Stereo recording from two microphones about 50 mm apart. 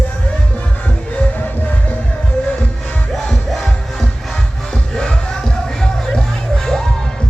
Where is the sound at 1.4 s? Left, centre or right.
Left.